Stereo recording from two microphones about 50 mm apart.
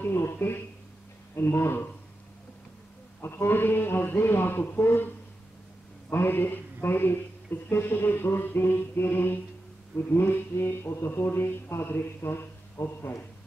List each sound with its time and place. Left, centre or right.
0.0 s a sound: left
1.3 s speech: left
3.2 s speech: left
6.0 s mantra: left
7.7 s speech: left
11.1 s speech: left